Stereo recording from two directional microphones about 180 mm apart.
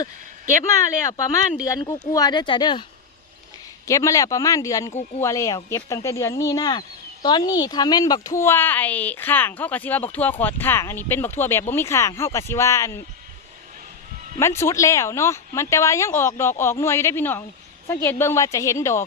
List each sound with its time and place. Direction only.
1.6 s speech: 20° left (ahead or behind)
3.8 s speech: 15° left (ahead or behind)
14.3 s speech: 15° left (ahead or behind)